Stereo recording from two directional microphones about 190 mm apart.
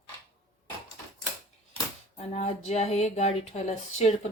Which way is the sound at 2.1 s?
35° left (ahead or behind).